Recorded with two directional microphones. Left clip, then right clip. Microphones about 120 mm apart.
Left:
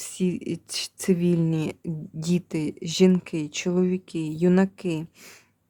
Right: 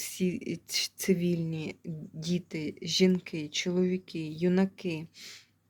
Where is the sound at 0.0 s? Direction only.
60° left (ahead or behind).